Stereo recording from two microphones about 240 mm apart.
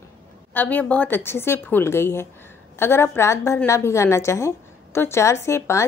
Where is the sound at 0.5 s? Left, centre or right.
Centre.